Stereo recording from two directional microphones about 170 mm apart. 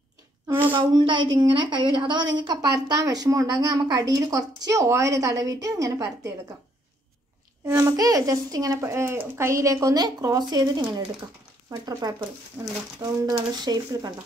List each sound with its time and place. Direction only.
0.7 s a woman's voice: 30° right (ahead or behind)
7.6 s a woman's voice: 20° right (ahead or behind)